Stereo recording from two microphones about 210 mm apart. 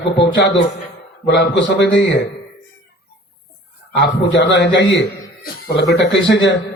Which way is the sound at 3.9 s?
60° left (ahead or behind).